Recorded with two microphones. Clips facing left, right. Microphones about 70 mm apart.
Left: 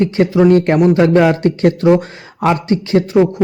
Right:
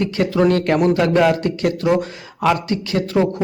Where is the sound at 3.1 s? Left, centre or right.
Centre.